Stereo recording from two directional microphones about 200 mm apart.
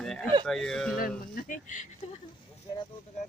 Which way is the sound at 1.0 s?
45° left (ahead or behind).